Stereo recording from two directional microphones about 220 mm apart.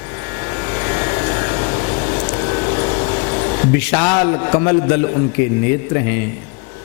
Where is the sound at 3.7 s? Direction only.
15° left (ahead or behind).